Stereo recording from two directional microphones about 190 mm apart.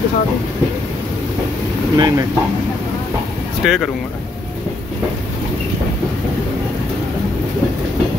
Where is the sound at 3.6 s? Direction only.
Centre (ahead or behind).